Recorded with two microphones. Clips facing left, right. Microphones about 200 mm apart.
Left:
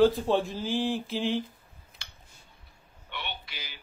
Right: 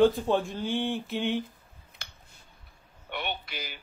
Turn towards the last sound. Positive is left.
turn(degrees=-50)  # may be behind; listen again after turning